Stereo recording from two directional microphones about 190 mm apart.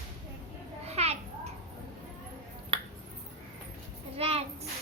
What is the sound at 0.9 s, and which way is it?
Children playing, 35° right (ahead or behind).